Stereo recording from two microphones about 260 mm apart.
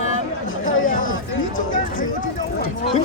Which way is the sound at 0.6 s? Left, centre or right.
Left.